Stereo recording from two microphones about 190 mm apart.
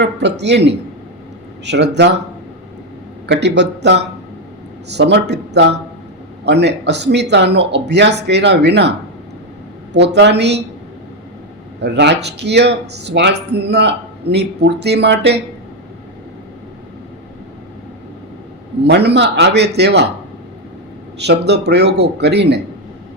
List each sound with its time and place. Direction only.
0.0 s speech: 65° right (ahead or behind)
3.2 s speech: 65° right (ahead or behind)
9.9 s speech: 65° right (ahead or behind)
11.8 s speech: 65° right (ahead or behind)
18.9 s speech: 60° right (ahead or behind)
21.2 s speech: 60° right (ahead or behind)